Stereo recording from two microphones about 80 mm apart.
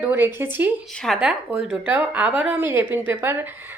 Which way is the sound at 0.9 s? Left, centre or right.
Centre.